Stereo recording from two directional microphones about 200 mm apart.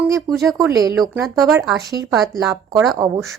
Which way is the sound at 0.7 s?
20° right (ahead or behind).